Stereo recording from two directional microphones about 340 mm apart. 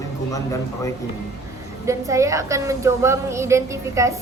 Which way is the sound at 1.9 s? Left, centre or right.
Centre.